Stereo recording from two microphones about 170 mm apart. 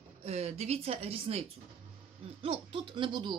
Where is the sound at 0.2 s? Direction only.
40° right (ahead or behind).